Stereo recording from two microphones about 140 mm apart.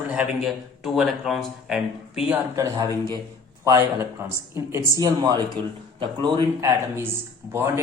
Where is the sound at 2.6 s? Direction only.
25° right (ahead or behind).